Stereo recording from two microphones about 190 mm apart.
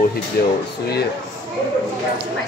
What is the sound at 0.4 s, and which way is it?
Speech, 55° left (ahead or behind).